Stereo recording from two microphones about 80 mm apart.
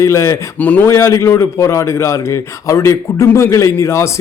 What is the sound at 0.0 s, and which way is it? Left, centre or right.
Speech, left.